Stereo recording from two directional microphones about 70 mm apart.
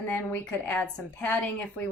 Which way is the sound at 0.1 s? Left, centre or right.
Left.